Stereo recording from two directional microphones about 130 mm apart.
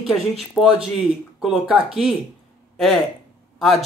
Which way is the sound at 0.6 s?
5° left (ahead or behind).